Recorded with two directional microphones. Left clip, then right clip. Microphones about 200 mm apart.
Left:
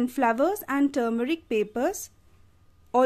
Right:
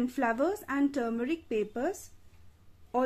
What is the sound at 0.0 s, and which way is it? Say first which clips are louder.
Speech: left 6 dB; 30° left (ahead or behind).